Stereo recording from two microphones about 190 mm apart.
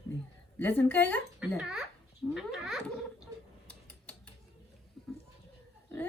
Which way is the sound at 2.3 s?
5° right (ahead or behind).